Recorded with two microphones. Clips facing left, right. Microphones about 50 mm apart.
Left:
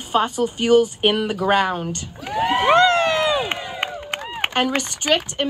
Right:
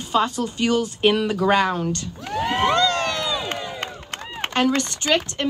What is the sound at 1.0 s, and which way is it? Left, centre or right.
Speech, left.